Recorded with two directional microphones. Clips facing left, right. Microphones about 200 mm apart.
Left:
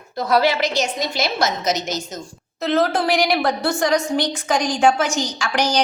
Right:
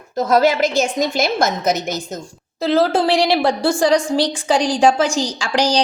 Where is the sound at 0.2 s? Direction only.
45° right (ahead or behind).